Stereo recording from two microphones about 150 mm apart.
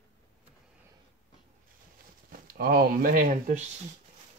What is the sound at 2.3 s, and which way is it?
Speech, 75° right (ahead or behind).